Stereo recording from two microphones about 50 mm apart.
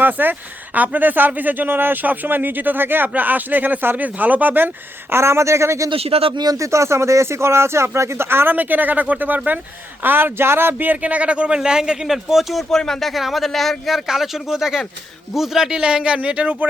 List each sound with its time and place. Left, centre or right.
0.0 s speech: right
5.1 s speech: right
8.5 s a man's voice: right; by 12.6 s centre
12.7 s speech: centre; by 16.6 s right